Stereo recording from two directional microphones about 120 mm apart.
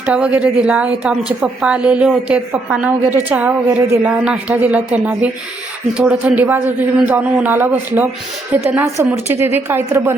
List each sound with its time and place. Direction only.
0.0 s a woman's voice: 10° right (ahead or behind)